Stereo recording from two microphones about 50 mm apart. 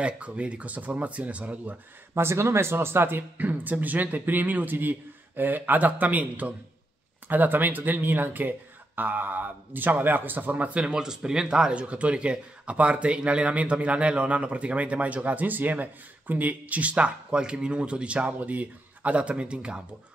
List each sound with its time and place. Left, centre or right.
0.0 s speech: right
2.1 s speech: right
10.8 s speech: centre